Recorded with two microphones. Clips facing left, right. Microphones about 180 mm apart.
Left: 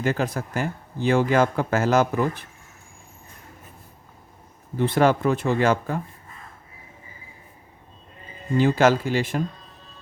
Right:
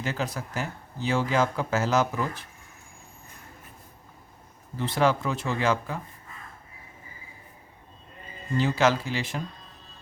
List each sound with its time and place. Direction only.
0.0 s speech: 55° left (ahead or behind)
4.8 s speech: 55° left (ahead or behind)
8.5 s speech: 50° left (ahead or behind)